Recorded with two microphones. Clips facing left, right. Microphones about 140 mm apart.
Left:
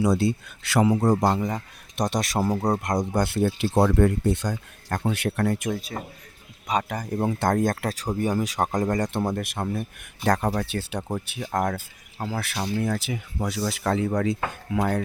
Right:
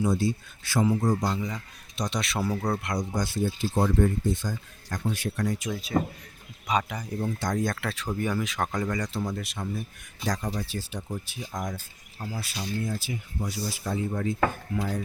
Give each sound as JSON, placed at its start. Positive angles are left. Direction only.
{"t": 0.0, "sound": "speech", "side_deg": 75}
{"t": 3.8, "sound": "speech", "side_deg": 80}
{"t": 6.7, "sound": "speech", "side_deg": 45}